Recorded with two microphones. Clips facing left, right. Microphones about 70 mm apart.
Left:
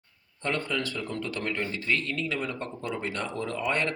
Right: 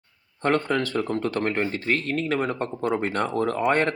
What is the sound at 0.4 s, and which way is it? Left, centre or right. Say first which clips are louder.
Speech: right 7 dB; right.